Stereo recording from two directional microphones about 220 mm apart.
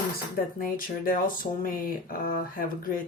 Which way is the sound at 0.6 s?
40° left (ahead or behind).